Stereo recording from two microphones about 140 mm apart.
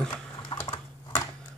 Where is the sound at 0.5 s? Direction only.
40° left (ahead or behind).